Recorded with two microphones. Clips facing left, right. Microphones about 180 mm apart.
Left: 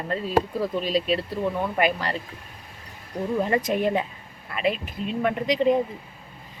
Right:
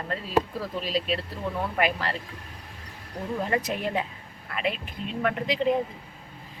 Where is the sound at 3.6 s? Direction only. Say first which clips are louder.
Left 6 dB; 45° left (ahead or behind).